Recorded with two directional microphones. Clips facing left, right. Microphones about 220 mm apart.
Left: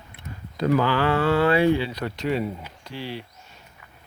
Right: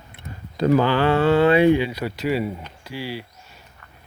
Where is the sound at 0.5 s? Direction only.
30° right (ahead or behind); by 2.6 s 5° right (ahead or behind).